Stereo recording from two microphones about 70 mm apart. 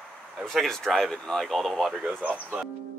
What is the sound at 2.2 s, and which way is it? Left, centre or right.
Speech, right.